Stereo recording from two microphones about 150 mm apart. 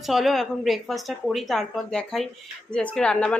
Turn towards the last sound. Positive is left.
turn(degrees=5)  # may be behind; listen again after turning